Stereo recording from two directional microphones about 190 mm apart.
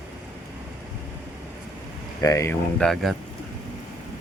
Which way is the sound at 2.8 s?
Centre (ahead or behind).